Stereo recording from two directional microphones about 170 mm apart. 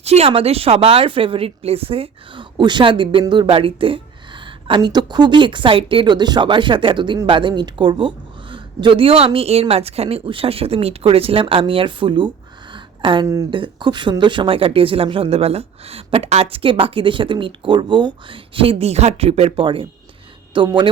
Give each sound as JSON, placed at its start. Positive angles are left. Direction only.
{"t": 0.0, "sound": "speech", "side_deg": -40}
{"t": 12.7, "sound": "a sound", "side_deg": -30}
{"t": 13.5, "sound": "speech", "side_deg": -30}